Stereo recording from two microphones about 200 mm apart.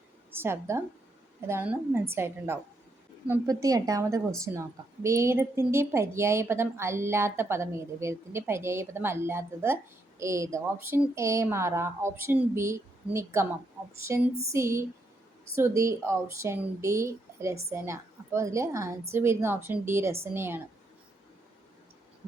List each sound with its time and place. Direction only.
0.3 s a woman's voice: 10° right (ahead or behind)